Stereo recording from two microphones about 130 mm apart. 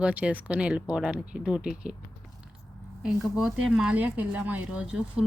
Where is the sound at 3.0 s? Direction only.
5° right (ahead or behind).